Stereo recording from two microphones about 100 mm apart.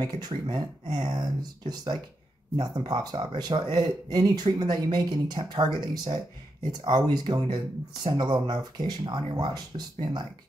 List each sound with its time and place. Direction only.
0.0 s speech: 40° right (ahead or behind)